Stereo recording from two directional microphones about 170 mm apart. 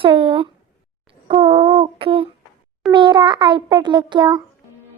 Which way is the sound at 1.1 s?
35° right (ahead or behind).